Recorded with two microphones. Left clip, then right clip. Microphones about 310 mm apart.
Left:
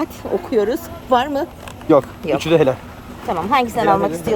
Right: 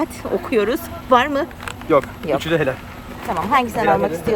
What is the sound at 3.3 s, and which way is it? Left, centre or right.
Speech, centre.